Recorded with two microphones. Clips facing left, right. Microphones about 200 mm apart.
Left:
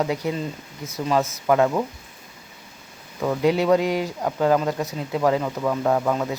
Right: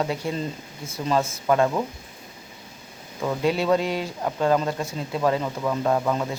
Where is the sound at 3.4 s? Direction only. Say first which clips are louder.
Left 3 dB; 15° left (ahead or behind).